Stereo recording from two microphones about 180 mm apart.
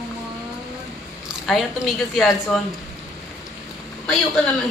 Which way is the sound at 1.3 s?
Centre (ahead or behind).